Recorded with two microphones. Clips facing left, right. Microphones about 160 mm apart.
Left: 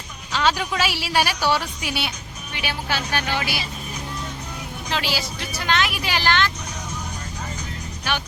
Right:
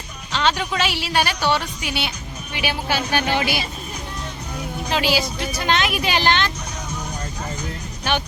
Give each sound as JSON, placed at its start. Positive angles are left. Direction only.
{"t": 0.3, "sound": "speech", "side_deg": 5}
{"t": 2.6, "sound": "speech", "side_deg": -15}
{"t": 4.9, "sound": "speech", "side_deg": -15}
{"t": 8.1, "sound": "speech", "side_deg": -25}